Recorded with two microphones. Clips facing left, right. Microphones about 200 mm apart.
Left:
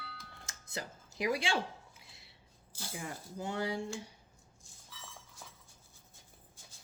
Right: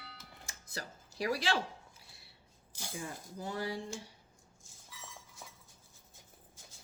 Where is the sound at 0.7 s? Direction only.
20° left (ahead or behind).